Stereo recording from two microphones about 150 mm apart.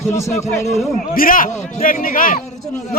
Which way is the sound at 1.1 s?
70° left (ahead or behind).